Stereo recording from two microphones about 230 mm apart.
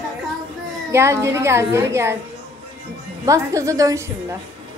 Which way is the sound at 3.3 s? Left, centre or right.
Centre.